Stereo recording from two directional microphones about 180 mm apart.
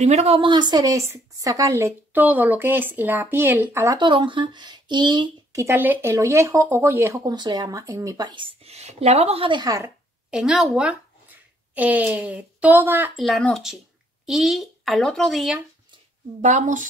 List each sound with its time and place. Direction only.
0.0 s speech: 35° right (ahead or behind)
10.3 s speech: 5° right (ahead or behind)
13.2 s speech: centre (ahead or behind)
16.3 s a woman's voice: 40° right (ahead or behind)